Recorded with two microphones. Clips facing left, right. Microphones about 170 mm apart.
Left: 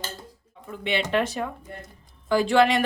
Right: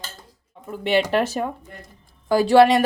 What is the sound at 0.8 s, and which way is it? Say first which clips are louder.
Speech: right 5 dB; 40° right (ahead or behind).